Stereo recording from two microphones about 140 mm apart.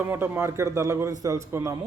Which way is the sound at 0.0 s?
15° right (ahead or behind).